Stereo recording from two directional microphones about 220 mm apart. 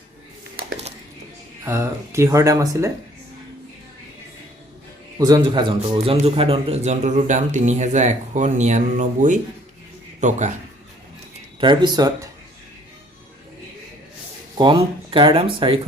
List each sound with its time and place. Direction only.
1.6 s speech: 10° right (ahead or behind)
5.2 s speech: 20° right (ahead or behind); by 10.5 s 35° right (ahead or behind)
11.6 s speech: 20° right (ahead or behind)
14.6 s speech: 20° right (ahead or behind)